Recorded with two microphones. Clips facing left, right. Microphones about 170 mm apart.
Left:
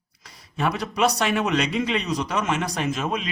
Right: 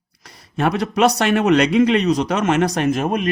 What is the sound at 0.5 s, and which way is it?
Speech, 70° right (ahead or behind).